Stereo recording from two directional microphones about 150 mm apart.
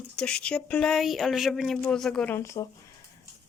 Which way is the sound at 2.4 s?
20° left (ahead or behind).